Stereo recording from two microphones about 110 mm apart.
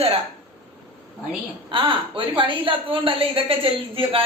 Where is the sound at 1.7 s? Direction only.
50° right (ahead or behind).